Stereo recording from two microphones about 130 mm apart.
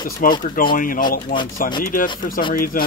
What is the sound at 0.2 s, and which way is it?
Speech, 90° left.